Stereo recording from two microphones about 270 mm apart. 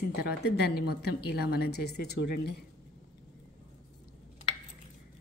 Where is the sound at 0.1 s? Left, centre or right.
Left.